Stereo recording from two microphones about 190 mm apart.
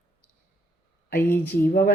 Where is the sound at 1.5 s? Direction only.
50° left (ahead or behind).